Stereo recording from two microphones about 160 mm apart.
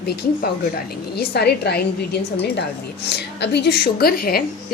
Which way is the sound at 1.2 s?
85° left.